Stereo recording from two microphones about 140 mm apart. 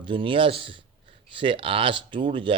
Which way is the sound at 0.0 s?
35° right (ahead or behind).